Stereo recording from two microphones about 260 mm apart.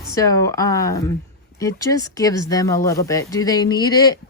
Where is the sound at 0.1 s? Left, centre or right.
Centre.